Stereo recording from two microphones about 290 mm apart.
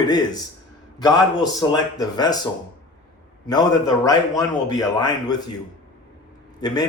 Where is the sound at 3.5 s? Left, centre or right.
Centre.